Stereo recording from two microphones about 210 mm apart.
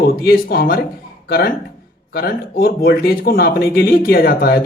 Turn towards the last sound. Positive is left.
turn(degrees=45)  # may be behind; listen again after turning